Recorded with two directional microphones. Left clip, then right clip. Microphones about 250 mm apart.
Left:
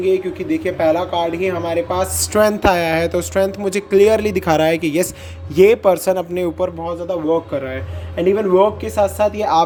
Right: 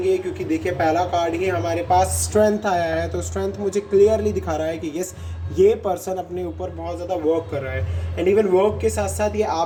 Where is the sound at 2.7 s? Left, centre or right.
Left.